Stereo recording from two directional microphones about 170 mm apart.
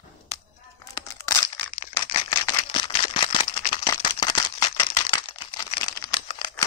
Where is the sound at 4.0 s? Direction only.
25° left (ahead or behind).